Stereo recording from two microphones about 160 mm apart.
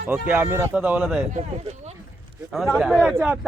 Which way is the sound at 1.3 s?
45° right (ahead or behind).